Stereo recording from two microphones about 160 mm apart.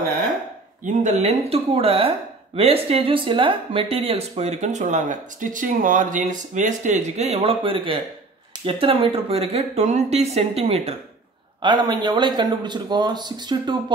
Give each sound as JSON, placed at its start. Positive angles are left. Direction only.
{"t": 0.8, "sound": "speech", "side_deg": -45}
{"t": 11.6, "sound": "speech", "side_deg": -25}